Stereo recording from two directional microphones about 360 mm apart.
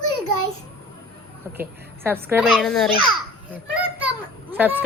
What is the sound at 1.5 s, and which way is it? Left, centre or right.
A child's voice, centre.